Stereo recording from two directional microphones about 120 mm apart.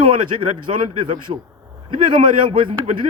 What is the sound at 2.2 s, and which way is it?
Speech, 45° right (ahead or behind).